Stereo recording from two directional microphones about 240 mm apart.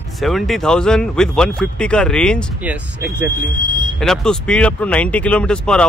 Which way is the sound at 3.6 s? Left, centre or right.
Centre.